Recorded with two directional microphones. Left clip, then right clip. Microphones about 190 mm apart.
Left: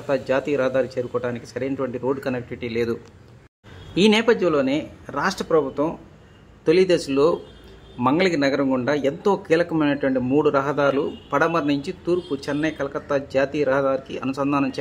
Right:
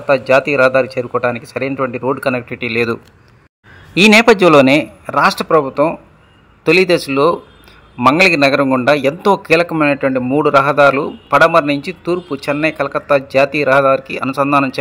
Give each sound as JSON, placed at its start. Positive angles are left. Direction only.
{"t": 0.0, "sound": "a man's voice", "side_deg": -15}
{"t": 5.0, "sound": "a man's voice", "side_deg": -25}